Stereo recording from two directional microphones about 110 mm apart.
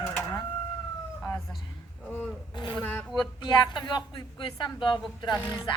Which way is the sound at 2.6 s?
40° left (ahead or behind).